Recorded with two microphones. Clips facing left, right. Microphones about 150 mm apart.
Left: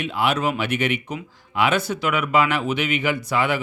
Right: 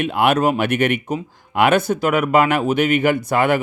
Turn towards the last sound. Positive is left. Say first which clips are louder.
# right 5 dB
turn(degrees=-55)  # may be behind; listen again after turning